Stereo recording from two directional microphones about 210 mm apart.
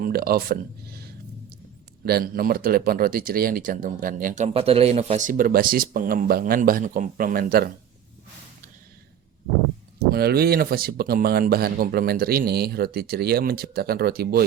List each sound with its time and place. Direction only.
0.0 s speech: 45° right (ahead or behind)
10.1 s speech: 50° right (ahead or behind)